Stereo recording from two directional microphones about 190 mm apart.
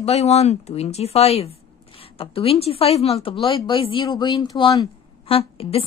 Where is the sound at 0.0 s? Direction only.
35° left (ahead or behind).